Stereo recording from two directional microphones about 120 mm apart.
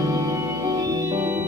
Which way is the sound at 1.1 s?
20° right (ahead or behind).